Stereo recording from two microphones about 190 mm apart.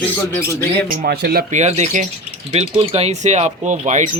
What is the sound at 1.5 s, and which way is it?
Speech, 35° right (ahead or behind).